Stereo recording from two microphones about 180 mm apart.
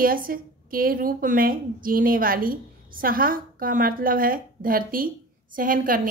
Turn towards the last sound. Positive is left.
turn(degrees=-50)  # may be behind; listen again after turning